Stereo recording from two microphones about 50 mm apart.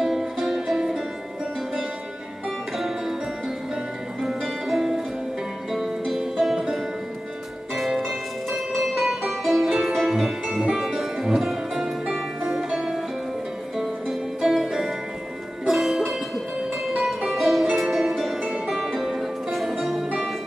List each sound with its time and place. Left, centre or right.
0.0 s music: centre
2.8 s music: centre
7.7 s music: centre